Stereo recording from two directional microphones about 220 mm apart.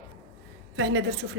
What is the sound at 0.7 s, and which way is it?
Speech, 55° right (ahead or behind).